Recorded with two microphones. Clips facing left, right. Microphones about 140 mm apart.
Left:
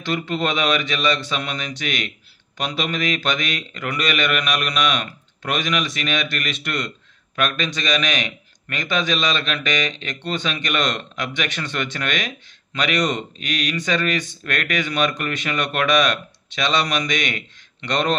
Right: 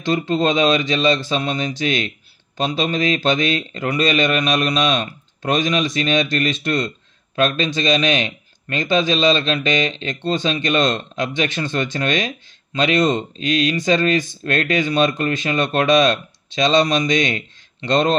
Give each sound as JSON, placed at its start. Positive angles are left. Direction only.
{"t": 0.3, "sound": "a man's voice", "side_deg": -25}